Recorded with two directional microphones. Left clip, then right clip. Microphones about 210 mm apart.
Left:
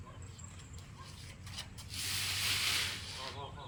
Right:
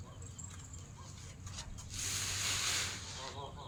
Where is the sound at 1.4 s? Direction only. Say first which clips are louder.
Left 3 dB; 30° left (ahead or behind).